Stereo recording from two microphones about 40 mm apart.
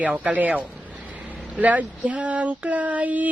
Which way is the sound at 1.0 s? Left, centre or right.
Right.